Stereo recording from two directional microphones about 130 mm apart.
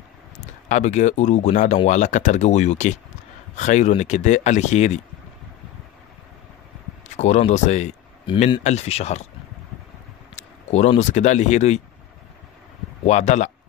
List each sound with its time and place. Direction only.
0.4 s speech: 65° left (ahead or behind)
7.2 s speech: 60° left (ahead or behind)
10.3 s speech: 60° left (ahead or behind)
13.0 s speech: 65° left (ahead or behind)